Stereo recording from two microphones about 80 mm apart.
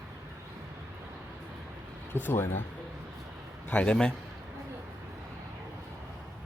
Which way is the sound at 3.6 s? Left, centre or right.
Centre.